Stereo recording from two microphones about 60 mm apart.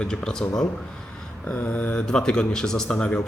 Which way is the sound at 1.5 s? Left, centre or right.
Left.